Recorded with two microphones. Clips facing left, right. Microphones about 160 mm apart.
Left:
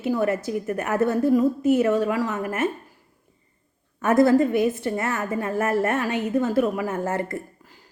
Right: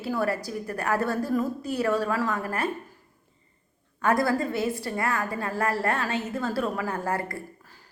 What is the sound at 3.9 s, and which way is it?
A woman's voice, 20° left (ahead or behind).